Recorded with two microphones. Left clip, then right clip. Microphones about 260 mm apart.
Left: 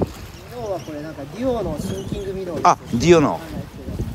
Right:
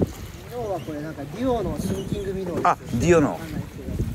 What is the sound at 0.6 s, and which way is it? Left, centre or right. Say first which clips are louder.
Speech: left 1 dB; centre.